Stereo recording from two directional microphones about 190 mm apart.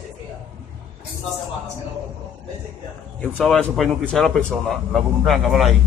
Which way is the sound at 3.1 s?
5° left (ahead or behind).